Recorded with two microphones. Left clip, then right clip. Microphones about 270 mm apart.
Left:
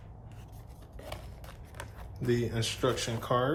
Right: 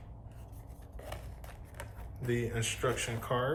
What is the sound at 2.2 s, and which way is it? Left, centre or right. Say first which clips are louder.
Speech: left 3 dB; centre.